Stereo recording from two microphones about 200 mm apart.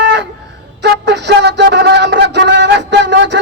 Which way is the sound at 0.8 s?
60° right (ahead or behind).